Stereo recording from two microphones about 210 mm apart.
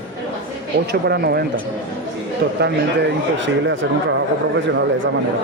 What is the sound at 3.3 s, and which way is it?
Speech, 60° right (ahead or behind).